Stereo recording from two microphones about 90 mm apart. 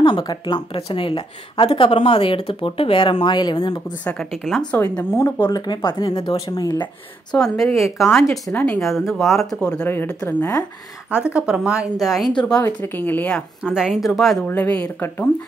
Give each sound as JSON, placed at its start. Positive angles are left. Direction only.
{"t": 0.0, "sound": "speech", "side_deg": 55}
{"t": 0.7, "sound": "speech", "side_deg": 85}
{"t": 4.0, "sound": "speech", "side_deg": 15}
{"t": 5.9, "sound": "speech", "side_deg": 55}
{"t": 7.3, "sound": "speech", "side_deg": 5}
{"t": 9.8, "sound": "a woman's voice", "side_deg": 25}
{"t": 11.3, "sound": "speech", "side_deg": -10}
{"t": 12.0, "sound": "speech", "side_deg": 0}
{"t": 12.6, "sound": "a woman's voice", "side_deg": 25}
{"t": 13.7, "sound": "speech", "side_deg": -5}
{"t": 14.5, "sound": "a woman's voice", "side_deg": 15}